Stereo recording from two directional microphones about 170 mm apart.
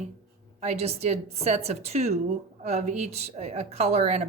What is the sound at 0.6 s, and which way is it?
Speech, 40° right (ahead or behind).